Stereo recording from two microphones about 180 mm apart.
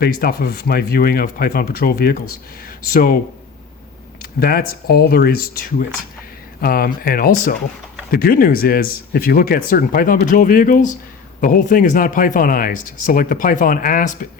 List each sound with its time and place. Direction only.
0.0 s speech: 60° left (ahead or behind)
4.2 s speech: 60° left (ahead or behind)